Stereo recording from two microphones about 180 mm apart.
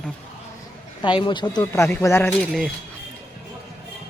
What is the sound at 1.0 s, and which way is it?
Speech, 25° left (ahead or behind).